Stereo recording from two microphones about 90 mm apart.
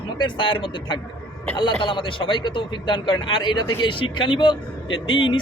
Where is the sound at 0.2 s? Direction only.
65° left (ahead or behind).